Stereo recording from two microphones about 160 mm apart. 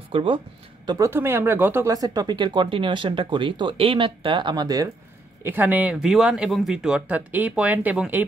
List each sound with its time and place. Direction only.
0.1 s speech: 35° right (ahead or behind)
0.8 s speech: 20° right (ahead or behind)
5.4 s speech: 10° right (ahead or behind)